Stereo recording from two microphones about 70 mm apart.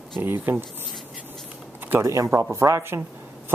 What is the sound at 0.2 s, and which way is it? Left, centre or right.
Speech, right.